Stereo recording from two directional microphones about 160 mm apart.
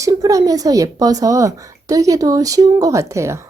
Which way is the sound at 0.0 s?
20° right (ahead or behind).